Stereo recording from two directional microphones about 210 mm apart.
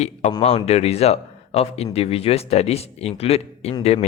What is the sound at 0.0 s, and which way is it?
Speech, 30° left (ahead or behind).